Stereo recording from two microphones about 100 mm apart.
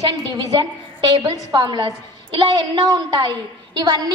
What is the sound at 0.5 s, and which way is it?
A woman's voice, 45° right (ahead or behind).